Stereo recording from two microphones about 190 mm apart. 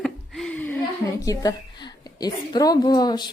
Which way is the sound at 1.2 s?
20° left (ahead or behind).